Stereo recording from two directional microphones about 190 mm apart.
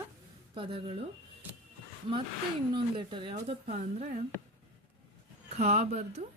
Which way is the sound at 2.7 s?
25° right (ahead or behind).